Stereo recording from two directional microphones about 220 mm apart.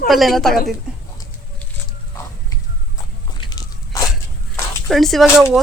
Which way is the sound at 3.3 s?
20° left (ahead or behind).